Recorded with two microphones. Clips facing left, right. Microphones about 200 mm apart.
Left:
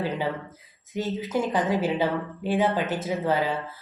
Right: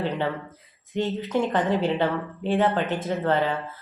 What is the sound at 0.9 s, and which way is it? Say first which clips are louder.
Speech: right 2 dB; 5° left (ahead or behind).